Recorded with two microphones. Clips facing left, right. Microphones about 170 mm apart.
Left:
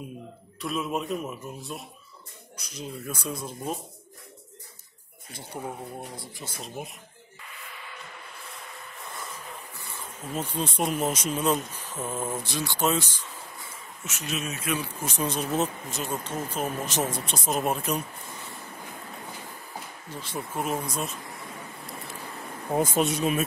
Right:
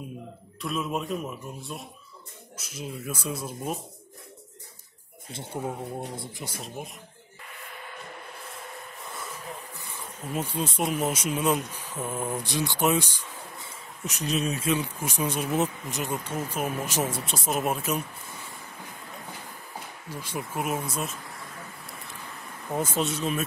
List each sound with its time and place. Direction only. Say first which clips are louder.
0.6 s speech: even; centre (ahead or behind)
5.3 s speech: right 3 dB; 25° right (ahead or behind)
9.9 s speech: right 1 dB; 10° right (ahead or behind)
14.0 s speech: right 5 dB; 35° right (ahead or behind)
15.0 s speech: left 1 dB; 10° right (ahead or behind)
20.1 s speech: right 1 dB; 10° right (ahead or behind)
22.8 s speech: left 3 dB; 10° left (ahead or behind)